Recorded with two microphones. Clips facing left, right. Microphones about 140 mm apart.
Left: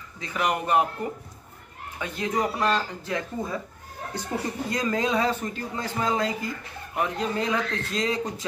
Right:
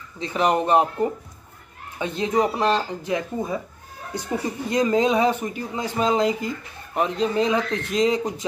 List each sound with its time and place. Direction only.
0.2 s speech: 30° right (ahead or behind)
4.6 s speech: 20° right (ahead or behind)